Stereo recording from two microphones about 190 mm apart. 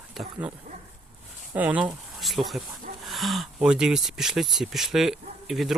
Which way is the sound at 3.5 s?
5° right (ahead or behind).